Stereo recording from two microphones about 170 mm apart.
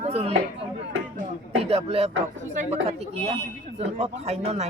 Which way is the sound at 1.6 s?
35° right (ahead or behind).